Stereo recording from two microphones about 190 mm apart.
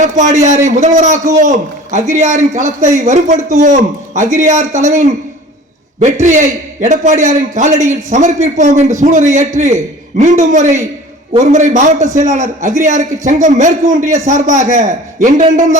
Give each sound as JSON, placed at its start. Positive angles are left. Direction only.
{"t": 0.0, "sound": "a man's voice", "side_deg": -40}